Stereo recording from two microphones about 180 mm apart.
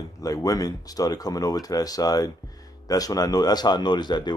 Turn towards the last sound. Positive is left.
turn(degrees=25)  # may be behind; listen again after turning